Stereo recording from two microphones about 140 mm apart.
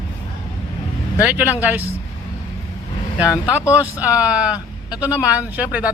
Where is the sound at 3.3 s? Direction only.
20° left (ahead or behind).